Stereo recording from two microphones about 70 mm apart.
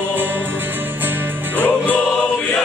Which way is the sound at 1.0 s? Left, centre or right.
Right.